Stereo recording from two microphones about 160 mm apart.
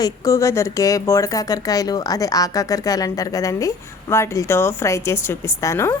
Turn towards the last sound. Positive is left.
turn(degrees=15)  # may be behind; listen again after turning